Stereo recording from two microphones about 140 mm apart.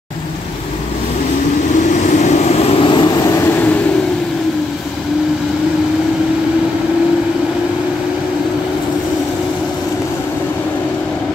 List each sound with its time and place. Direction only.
1.9 s vehicle: 55° left (ahead or behind); by 3.7 s 15° left (ahead or behind)